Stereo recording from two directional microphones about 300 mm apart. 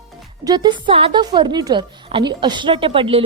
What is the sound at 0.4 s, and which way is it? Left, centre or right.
Speech, centre.